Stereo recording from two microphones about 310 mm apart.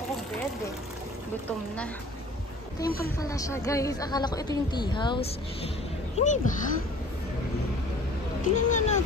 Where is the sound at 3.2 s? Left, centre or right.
Centre.